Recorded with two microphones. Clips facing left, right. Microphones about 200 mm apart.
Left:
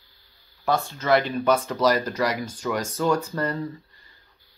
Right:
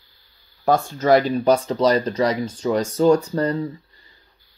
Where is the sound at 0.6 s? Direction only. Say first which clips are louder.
Right 6 dB; 45° right (ahead or behind).